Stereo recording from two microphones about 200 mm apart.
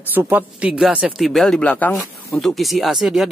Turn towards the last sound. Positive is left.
turn(degrees=0)  # may be behind; listen again after turning